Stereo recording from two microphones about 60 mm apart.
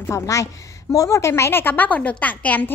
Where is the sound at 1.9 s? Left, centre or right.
Left.